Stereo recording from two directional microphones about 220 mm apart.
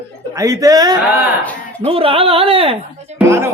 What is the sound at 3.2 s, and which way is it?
Speech, 10° right (ahead or behind).